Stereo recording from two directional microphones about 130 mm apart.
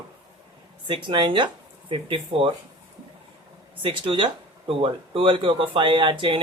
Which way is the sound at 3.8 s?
40° right (ahead or behind).